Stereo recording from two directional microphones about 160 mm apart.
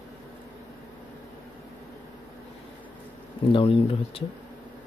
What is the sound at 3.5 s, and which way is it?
Speech, 35° left (ahead or behind).